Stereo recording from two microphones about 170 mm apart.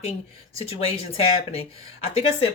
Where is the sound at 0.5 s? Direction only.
35° left (ahead or behind).